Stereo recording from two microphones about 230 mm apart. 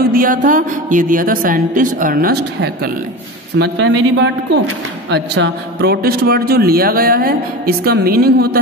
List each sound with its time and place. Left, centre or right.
0.0 s a woman's voice: right